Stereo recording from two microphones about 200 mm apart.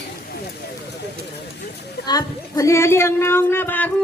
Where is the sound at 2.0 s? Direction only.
15° left (ahead or behind).